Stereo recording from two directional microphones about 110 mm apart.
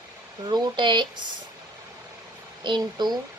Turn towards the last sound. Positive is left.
turn(degrees=-40)  # may be behind; listen again after turning